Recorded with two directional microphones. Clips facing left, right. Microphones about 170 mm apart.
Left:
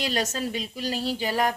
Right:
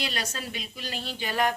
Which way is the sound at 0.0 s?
40° left (ahead or behind).